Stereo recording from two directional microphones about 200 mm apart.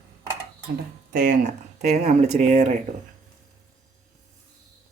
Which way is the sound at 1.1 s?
45° right (ahead or behind).